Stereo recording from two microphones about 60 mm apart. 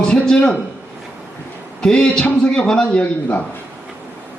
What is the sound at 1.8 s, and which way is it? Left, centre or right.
A man's voice, centre.